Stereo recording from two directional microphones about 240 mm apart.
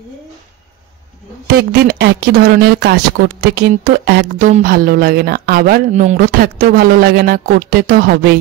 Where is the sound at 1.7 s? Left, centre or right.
Right.